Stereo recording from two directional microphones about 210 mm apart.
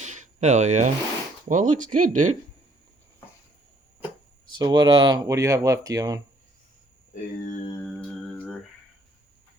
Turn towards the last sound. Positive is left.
turn(degrees=40)  # may be behind; listen again after turning